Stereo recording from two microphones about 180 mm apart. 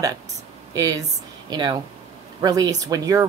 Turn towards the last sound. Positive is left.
turn(degrees=-20)  # may be behind; listen again after turning